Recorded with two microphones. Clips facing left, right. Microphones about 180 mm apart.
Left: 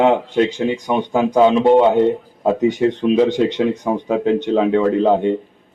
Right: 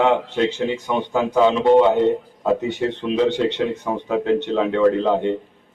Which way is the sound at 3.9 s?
15° left (ahead or behind).